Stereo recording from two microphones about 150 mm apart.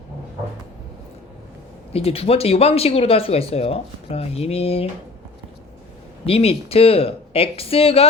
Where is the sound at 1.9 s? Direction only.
40° left (ahead or behind).